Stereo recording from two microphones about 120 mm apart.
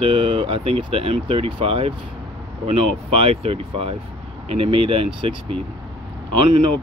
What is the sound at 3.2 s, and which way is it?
Speech, 55° right (ahead or behind).